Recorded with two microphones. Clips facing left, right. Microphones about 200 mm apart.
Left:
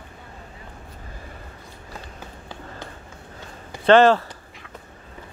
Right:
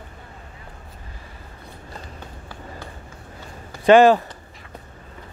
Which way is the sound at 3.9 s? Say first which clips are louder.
Right 2 dB; 15° right (ahead or behind).